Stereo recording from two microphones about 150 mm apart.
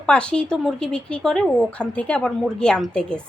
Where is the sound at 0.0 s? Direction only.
5° left (ahead or behind).